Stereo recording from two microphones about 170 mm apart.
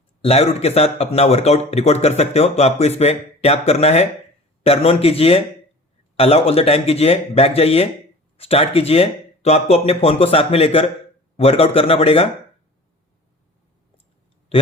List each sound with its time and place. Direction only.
0.2 s speech: 35° left (ahead or behind)